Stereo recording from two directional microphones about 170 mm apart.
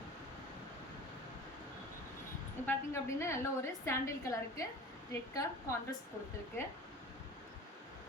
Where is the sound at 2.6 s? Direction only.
15° left (ahead or behind).